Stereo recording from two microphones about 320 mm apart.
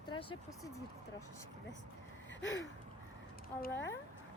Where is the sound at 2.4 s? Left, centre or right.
Left.